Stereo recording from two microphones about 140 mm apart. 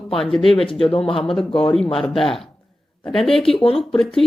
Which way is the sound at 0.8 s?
40° left (ahead or behind).